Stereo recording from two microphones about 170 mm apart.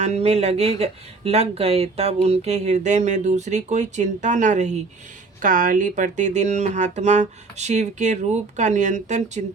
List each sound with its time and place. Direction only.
0.0 s speech: 40° right (ahead or behind)